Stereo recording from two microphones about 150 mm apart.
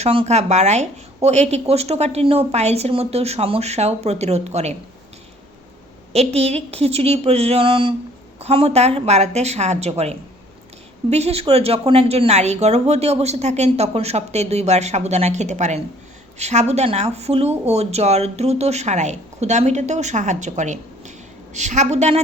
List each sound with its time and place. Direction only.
0.0 s speech: 40° right (ahead or behind)
6.1 s a woman's voice: 45° right (ahead or behind)